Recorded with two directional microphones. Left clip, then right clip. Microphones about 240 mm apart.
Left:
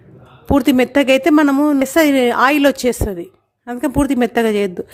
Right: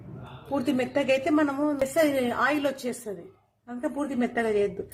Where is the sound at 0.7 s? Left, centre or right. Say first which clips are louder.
Left 9 dB; left.